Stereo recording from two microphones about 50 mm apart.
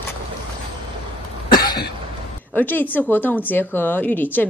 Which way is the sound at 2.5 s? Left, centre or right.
Left.